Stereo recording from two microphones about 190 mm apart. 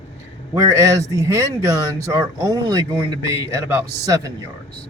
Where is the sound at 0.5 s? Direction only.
15° right (ahead or behind).